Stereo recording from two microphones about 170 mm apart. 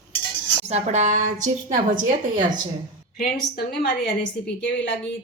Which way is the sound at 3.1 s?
65° left (ahead or behind).